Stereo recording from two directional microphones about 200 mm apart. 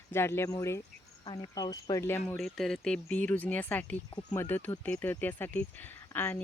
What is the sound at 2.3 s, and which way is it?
Speech, centre (ahead or behind).